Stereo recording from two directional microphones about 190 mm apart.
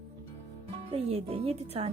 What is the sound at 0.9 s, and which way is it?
Speech, 30° right (ahead or behind).